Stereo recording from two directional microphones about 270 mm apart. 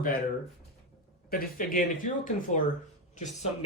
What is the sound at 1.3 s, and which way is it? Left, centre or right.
Speech, left.